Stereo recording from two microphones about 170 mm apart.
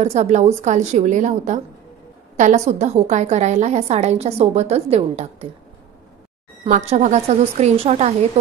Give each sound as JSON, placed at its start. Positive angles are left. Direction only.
{"t": 0.0, "sound": "a woman's voice", "side_deg": -40}
{"t": 6.7, "sound": "a woman's voice", "side_deg": -40}